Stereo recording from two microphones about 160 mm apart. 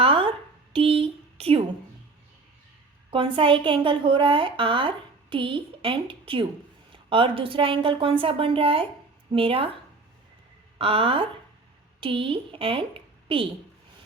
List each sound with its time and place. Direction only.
0.0 s a sound: 35° right (ahead or behind)
3.1 s a woman's voice: 35° right (ahead or behind)
10.8 s a woman's voice: 35° right (ahead or behind)